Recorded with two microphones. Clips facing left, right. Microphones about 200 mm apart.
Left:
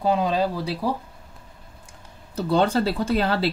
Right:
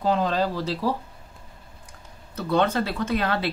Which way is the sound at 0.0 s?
10° left (ahead or behind).